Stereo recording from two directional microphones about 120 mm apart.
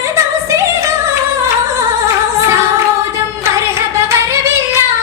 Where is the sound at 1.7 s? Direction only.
25° right (ahead or behind).